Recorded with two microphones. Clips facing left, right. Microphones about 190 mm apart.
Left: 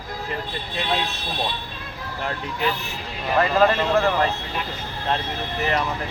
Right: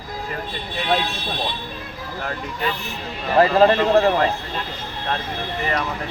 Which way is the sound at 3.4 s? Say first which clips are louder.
Right 4 dB; 30° right (ahead or behind).